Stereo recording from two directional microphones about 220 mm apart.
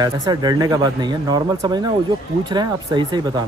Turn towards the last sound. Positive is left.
turn(degrees=-20)  # may be behind; listen again after turning